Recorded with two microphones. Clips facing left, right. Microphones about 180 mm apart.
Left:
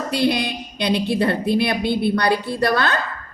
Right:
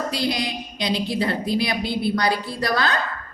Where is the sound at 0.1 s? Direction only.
60° left (ahead or behind).